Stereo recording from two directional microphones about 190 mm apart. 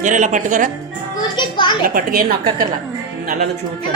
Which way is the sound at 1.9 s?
50° right (ahead or behind).